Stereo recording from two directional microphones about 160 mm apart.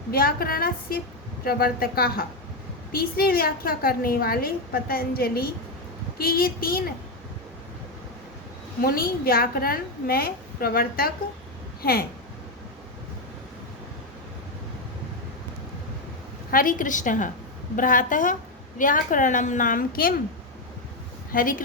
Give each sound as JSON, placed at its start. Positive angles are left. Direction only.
{"t": 0.1, "sound": "a woman's voice", "side_deg": 70}
{"t": 8.8, "sound": "a woman's voice", "side_deg": 70}
{"t": 16.5, "sound": "a woman's voice", "side_deg": 60}
{"t": 21.3, "sound": "a woman's voice", "side_deg": 60}